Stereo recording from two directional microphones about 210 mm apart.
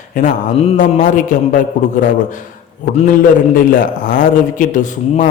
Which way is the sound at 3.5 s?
40° left (ahead or behind).